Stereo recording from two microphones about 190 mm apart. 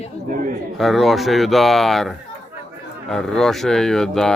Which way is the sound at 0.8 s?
Centre (ahead or behind).